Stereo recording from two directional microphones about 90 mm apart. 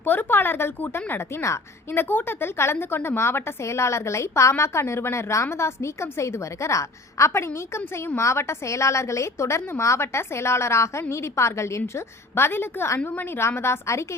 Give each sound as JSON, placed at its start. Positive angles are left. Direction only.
{"t": 0.0, "sound": "a woman's voice", "side_deg": 20}
{"t": 1.9, "sound": "a woman's voice", "side_deg": 20}